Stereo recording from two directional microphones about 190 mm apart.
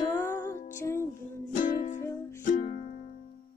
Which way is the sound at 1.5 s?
45° left (ahead or behind).